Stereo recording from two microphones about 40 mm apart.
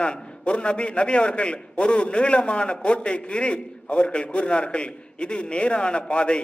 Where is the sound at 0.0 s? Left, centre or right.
Left.